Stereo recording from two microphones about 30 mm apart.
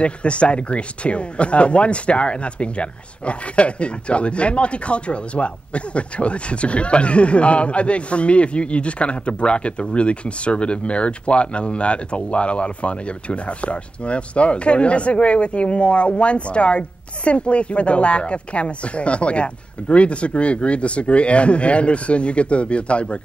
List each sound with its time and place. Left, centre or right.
0.0 s speech: left